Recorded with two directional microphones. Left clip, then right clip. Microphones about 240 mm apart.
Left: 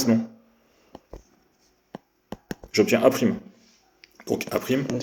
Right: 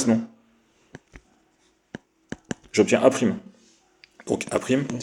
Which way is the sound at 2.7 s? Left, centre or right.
Right.